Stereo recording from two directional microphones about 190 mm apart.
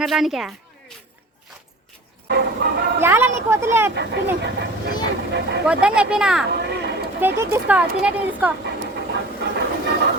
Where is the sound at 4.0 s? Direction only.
65° right (ahead or behind).